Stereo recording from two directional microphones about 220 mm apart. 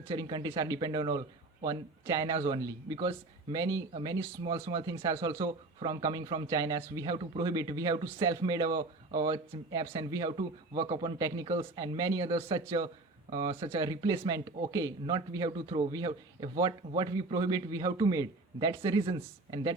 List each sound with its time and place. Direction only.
0.1 s speech: 15° right (ahead or behind)